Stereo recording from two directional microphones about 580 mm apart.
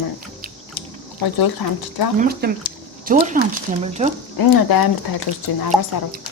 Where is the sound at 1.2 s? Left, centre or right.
Left.